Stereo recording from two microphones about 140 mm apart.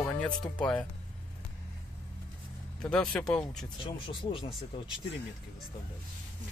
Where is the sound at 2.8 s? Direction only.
5° left (ahead or behind).